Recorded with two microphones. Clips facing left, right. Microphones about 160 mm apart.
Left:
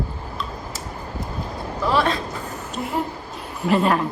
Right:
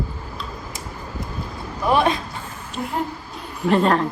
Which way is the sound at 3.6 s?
5° left (ahead or behind).